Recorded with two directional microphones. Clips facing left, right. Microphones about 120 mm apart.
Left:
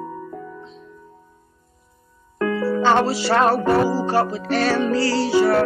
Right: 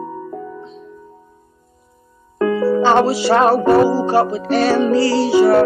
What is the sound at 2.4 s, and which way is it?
Music, 20° right (ahead or behind).